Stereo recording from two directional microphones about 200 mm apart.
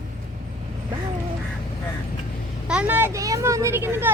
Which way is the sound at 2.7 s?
5° right (ahead or behind).